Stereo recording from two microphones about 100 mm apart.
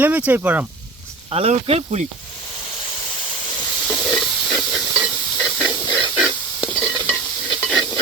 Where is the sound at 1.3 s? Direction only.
80° right.